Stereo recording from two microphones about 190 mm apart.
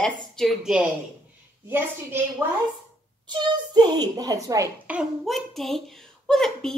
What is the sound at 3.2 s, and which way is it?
A child's voice, 25° right (ahead or behind).